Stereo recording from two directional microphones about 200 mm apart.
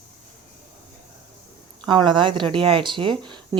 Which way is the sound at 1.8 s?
25° right (ahead or behind).